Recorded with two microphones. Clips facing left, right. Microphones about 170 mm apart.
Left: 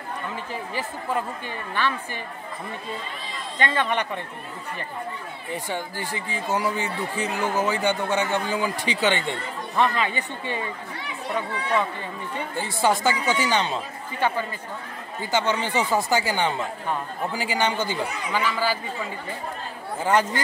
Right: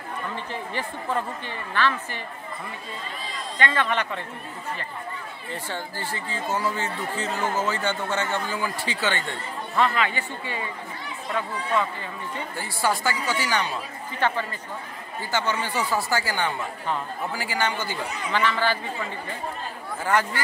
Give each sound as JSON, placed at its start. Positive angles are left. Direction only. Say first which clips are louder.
{"t": 1.7, "sound": "speech", "louder": "right 2 dB", "side_deg": 15}
{"t": 3.5, "sound": "speech", "louder": "left 1 dB", "side_deg": 15}
{"t": 5.5, "sound": "speech", "louder": "left 3 dB", "side_deg": 15}
{"t": 14.2, "sound": "speech", "louder": "left 1 dB", "side_deg": 10}
{"t": 20.0, "sound": "speech", "louder": "left 3 dB", "side_deg": 20}